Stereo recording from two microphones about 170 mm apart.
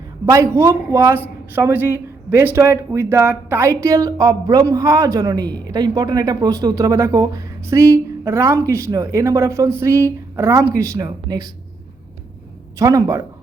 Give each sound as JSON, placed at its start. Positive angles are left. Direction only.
{"t": 0.3, "sound": "speech", "side_deg": -20}
{"t": 12.8, "sound": "speech", "side_deg": -20}